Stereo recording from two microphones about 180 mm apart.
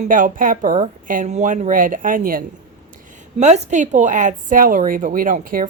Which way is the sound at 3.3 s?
40° right (ahead or behind).